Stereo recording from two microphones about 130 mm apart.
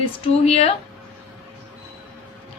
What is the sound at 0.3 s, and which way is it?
Speech, 50° left (ahead or behind).